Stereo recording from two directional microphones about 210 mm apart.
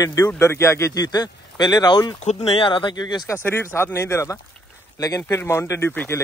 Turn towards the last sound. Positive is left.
turn(degrees=10)  # may be behind; listen again after turning